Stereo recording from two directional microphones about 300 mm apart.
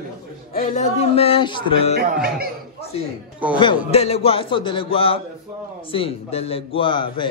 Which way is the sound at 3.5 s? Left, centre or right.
Centre.